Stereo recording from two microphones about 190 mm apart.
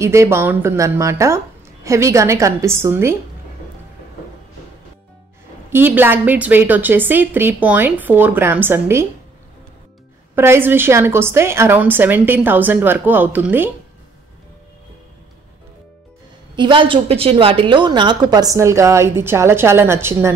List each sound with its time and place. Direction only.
0.0 s a woman's voice: 15° right (ahead or behind)
5.7 s a woman's voice: 10° right (ahead or behind)
10.3 s a woman's voice: 10° right (ahead or behind)
16.5 s a woman's voice: 25° right (ahead or behind)